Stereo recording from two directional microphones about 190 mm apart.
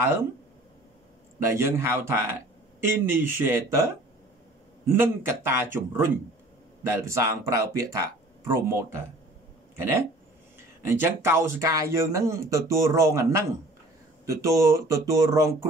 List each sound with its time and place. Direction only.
1.5 s speech: 15° right (ahead or behind)
4.8 s speech: 15° right (ahead or behind)
10.9 s speech: 15° right (ahead or behind)